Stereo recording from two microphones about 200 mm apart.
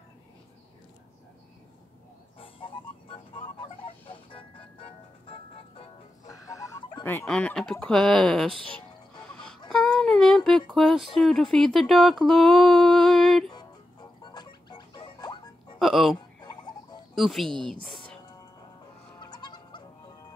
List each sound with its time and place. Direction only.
2.3 s music: 25° left (ahead or behind)
6.2 s chicken: 15° left (ahead or behind)
7.7 s speech: 5° left (ahead or behind)
9.7 s speech: centre (ahead or behind)
14.2 s music: 20° left (ahead or behind)
15.8 s speech: centre (ahead or behind)
16.3 s tick-tock: 20° left (ahead or behind)
17.1 s speech: centre (ahead or behind)
19.1 s fowl: 20° left (ahead or behind)